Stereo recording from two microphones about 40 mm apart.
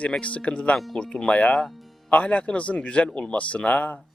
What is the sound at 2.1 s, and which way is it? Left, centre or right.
Speech, left.